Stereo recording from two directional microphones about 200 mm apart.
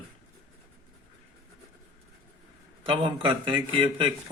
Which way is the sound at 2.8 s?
25° right (ahead or behind).